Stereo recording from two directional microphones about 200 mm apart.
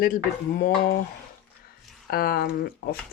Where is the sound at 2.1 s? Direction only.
50° left (ahead or behind).